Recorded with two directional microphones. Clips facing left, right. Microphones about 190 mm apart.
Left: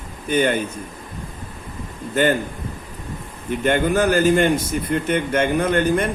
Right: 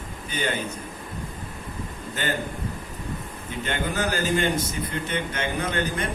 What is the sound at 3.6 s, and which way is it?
A man's voice, 55° left (ahead or behind).